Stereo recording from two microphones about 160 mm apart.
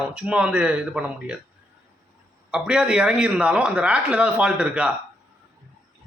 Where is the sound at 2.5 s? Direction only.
5° right (ahead or behind).